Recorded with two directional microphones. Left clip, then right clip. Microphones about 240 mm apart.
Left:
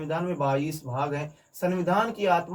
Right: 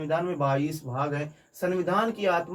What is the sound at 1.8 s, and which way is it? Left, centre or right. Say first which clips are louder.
Speech: left 3 dB; centre.